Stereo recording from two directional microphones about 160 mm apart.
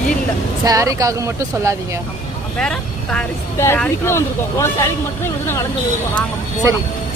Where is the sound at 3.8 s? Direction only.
15° left (ahead or behind).